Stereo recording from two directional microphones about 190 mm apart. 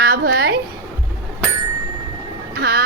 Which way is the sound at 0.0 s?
55° right (ahead or behind).